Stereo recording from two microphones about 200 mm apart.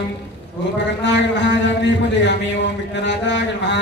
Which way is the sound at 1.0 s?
60° left (ahead or behind).